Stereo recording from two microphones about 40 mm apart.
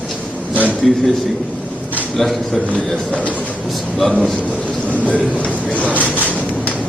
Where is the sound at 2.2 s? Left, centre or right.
Centre.